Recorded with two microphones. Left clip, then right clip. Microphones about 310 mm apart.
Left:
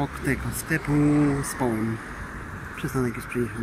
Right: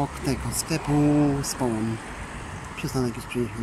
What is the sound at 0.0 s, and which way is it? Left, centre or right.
Speech, centre.